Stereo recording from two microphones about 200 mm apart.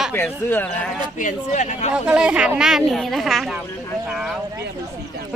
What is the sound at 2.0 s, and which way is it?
Speech, 5° right (ahead or behind).